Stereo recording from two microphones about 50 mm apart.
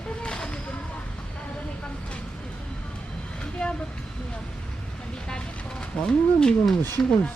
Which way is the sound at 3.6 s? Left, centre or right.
Centre.